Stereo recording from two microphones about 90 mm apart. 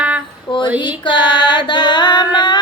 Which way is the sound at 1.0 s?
60° left (ahead or behind).